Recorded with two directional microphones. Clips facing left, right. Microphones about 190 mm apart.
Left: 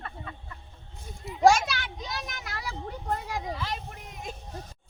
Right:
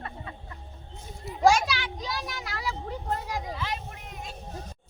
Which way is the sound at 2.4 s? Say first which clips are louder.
Right 4 dB; 50° left (ahead or behind).